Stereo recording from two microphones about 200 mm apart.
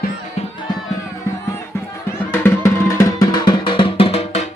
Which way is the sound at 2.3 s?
15° left (ahead or behind).